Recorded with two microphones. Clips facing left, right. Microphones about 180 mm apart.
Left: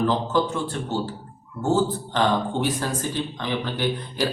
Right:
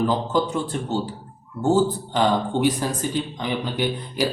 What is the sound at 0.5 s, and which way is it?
A man's voice, 15° right (ahead or behind).